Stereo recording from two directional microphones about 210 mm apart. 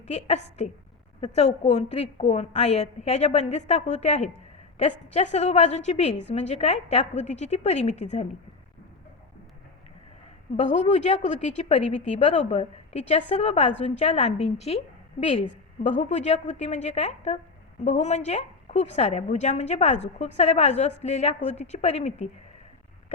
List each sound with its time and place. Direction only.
0.1 s a woman's voice: 30° left (ahead or behind)
10.6 s a woman's voice: 35° left (ahead or behind)